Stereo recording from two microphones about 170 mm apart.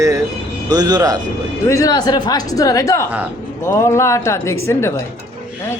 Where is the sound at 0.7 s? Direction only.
25° right (ahead or behind).